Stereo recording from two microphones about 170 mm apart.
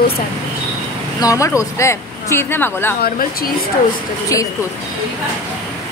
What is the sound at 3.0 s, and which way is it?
Speech, 60° left (ahead or behind).